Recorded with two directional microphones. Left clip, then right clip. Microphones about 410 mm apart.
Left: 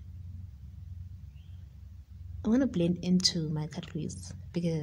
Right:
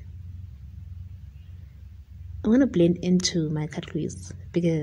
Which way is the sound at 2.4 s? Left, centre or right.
Right.